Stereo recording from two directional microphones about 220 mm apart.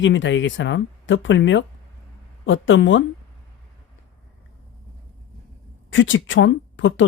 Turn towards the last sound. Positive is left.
turn(degrees=55)  # may be behind; listen again after turning